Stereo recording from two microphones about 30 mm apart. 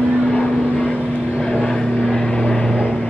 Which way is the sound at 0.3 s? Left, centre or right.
Left.